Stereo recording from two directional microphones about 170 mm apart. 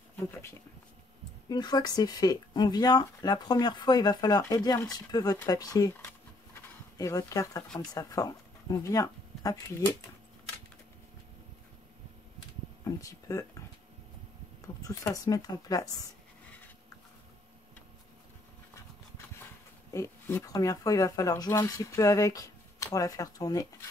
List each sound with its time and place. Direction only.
0.2 s speech: 15° left (ahead or behind)
12.8 s a sound: 20° left (ahead or behind)
14.8 s speech: 20° left (ahead or behind)
19.9 s speech: 15° left (ahead or behind)